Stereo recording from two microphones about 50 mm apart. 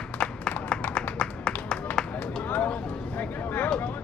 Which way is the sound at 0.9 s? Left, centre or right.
Centre.